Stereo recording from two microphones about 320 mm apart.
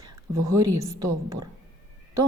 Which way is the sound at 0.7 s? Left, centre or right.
Centre.